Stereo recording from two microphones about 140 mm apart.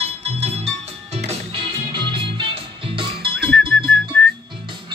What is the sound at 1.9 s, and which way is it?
Music, 35° right (ahead or behind).